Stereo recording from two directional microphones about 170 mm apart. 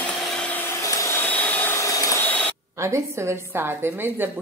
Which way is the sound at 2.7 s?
15° right (ahead or behind).